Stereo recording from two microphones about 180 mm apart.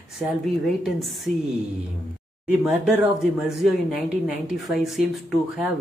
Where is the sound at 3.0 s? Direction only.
5° right (ahead or behind).